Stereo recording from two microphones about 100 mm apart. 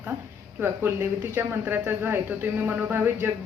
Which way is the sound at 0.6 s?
25° right (ahead or behind).